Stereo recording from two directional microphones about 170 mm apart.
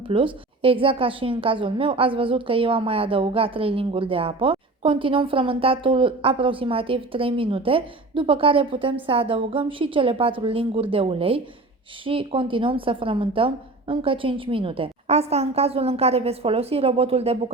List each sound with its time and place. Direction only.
0.1 s a woman's voice: 30° right (ahead or behind)